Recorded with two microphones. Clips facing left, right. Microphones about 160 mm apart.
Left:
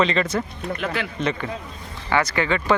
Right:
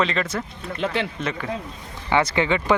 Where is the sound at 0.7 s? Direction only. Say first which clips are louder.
Right 2 dB; 30° right (ahead or behind).